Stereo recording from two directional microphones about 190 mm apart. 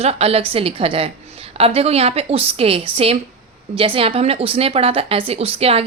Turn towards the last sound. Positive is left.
turn(degrees=-30)  # may be behind; listen again after turning